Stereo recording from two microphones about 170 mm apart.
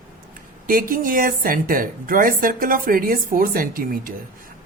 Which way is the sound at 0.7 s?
55° right (ahead or behind).